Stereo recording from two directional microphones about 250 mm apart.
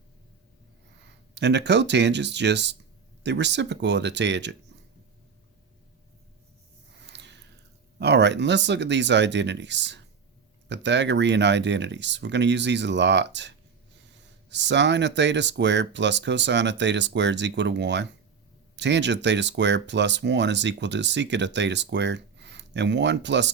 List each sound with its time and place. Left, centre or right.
1.4 s speech: right
7.0 s a sound: right
7.9 s speech: right